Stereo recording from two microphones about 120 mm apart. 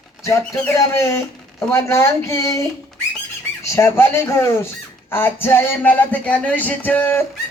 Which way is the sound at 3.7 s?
20° left (ahead or behind).